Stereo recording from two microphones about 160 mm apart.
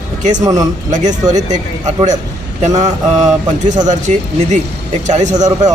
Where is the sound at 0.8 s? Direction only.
50° right (ahead or behind).